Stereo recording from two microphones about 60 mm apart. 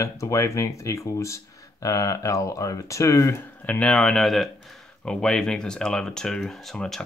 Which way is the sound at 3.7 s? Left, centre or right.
Left.